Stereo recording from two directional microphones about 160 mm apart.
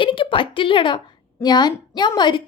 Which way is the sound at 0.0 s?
30° left (ahead or behind).